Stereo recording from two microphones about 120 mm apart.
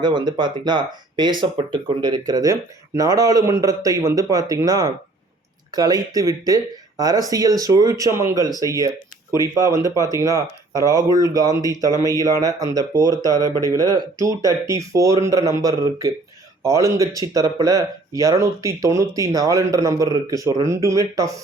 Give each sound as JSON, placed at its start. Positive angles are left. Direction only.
{"t": 0.0, "sound": "speech", "side_deg": -40}